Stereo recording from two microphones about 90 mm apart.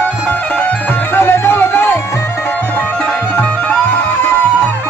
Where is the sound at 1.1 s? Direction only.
25° left (ahead or behind).